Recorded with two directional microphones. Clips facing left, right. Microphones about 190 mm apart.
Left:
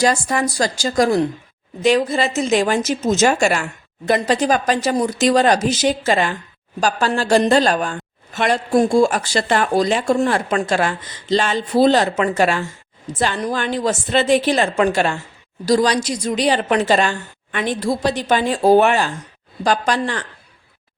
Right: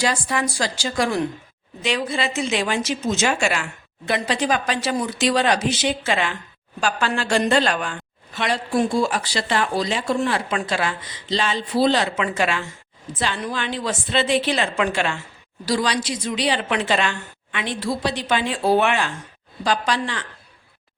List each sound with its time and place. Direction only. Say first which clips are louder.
0.0 s a woman's voice: left 5 dB; 45° left (ahead or behind)